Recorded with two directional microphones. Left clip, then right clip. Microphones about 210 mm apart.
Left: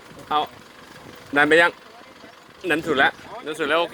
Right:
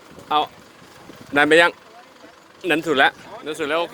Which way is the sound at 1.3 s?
15° right (ahead or behind).